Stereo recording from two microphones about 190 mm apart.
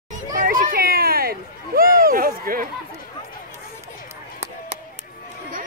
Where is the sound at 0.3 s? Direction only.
45° right (ahead or behind).